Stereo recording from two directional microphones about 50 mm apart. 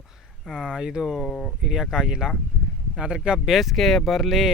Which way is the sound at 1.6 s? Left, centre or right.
Centre.